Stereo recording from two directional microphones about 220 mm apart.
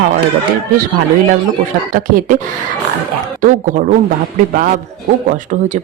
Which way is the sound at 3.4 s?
35° right (ahead or behind).